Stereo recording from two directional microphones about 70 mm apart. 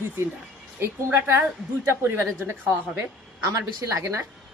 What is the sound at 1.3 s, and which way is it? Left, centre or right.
A woman's voice, right.